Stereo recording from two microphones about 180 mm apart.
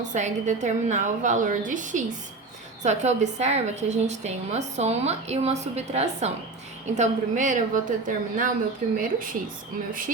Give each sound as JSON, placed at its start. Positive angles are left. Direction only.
{"t": 0.0, "sound": "a woman's voice", "side_deg": -40}